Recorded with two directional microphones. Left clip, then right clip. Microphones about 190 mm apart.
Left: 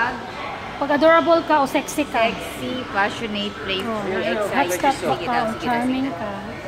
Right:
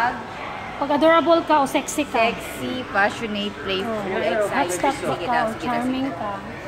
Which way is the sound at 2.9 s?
45° right (ahead or behind).